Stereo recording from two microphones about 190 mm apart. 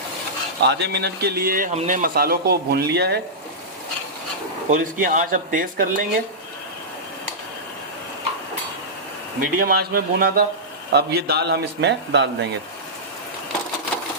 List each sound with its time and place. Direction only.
0.7 s speech: 60° right (ahead or behind)
4.7 s speech: 45° right (ahead or behind)
9.4 s speech: 50° right (ahead or behind)